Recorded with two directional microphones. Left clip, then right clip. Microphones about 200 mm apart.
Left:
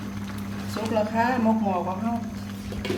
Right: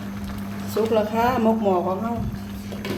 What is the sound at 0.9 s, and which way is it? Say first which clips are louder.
Speech: right 1 dB; 40° right (ahead or behind).